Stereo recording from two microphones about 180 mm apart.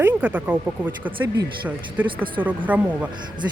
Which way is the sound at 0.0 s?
10° right (ahead or behind).